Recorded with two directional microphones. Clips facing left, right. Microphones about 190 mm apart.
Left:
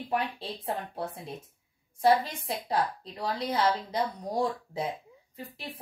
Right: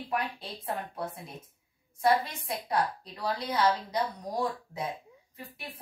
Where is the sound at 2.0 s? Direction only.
30° left (ahead or behind).